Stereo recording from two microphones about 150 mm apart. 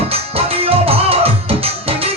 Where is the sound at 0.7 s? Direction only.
40° right (ahead or behind).